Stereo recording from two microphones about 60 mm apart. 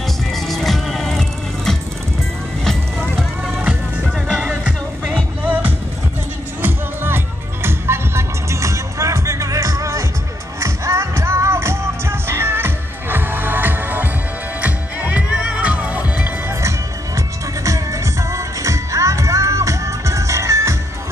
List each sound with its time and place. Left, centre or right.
0.3 s music: centre
2.6 s music: centre
4.3 s music: centre
6.6 s music: right
17.6 s music: right